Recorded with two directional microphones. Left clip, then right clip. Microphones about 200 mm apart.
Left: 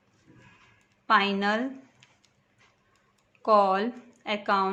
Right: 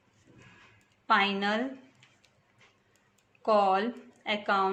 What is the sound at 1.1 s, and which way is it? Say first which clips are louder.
Speech: left 3 dB; 30° left (ahead or behind).